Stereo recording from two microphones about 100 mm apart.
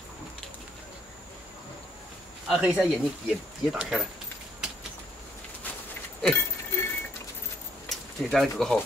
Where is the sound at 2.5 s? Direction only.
10° right (ahead or behind).